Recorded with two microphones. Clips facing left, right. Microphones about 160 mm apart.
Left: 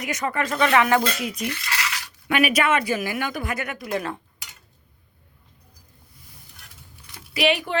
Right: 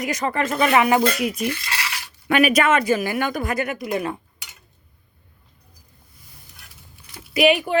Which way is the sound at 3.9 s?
15° right (ahead or behind).